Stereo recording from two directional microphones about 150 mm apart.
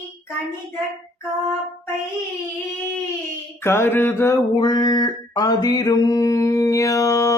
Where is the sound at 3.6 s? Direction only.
15° left (ahead or behind).